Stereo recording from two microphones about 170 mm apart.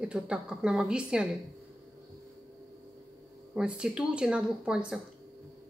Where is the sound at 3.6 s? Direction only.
5° right (ahead or behind).